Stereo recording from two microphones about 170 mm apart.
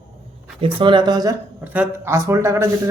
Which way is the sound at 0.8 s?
30° right (ahead or behind).